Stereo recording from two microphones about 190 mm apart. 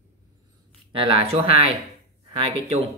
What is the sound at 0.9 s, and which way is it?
Speech, 25° right (ahead or behind).